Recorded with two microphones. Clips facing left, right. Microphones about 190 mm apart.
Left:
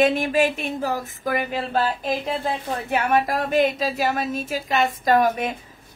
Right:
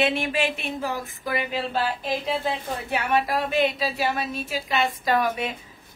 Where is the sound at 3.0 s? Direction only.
45° left (ahead or behind).